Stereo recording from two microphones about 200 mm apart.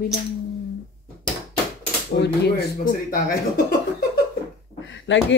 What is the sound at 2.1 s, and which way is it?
Speech, 60° left (ahead or behind).